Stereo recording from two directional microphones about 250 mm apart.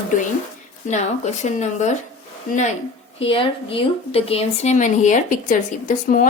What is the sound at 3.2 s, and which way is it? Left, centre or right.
Speech, left.